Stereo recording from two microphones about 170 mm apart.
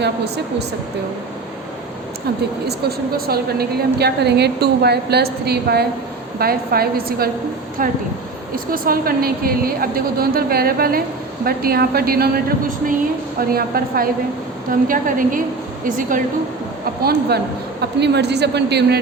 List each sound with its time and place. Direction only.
2.6 s a woman's voice: 65° right (ahead or behind)
17.0 s a woman's voice: 70° right (ahead or behind)